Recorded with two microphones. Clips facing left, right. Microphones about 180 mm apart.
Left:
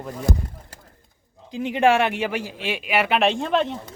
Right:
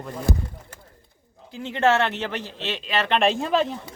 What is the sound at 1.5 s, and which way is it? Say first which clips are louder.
Speech: left 2 dB; 15° left (ahead or behind).